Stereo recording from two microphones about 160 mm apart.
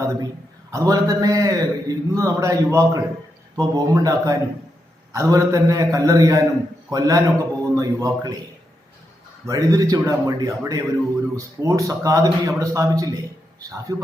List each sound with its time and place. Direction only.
0.0 s a sound: 20° right (ahead or behind)
0.7 s a man's voice: 20° right (ahead or behind)
9.5 s a man's voice: 20° right (ahead or behind)